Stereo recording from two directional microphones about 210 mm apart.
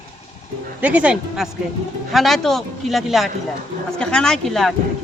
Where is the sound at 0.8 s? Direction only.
5° right (ahead or behind).